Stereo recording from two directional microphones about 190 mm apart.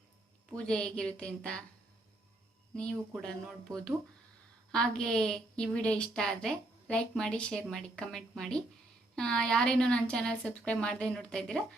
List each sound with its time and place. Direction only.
0.5 s a woman's voice: 5° left (ahead or behind)
3.2 s a woman's voice: 5° left (ahead or behind)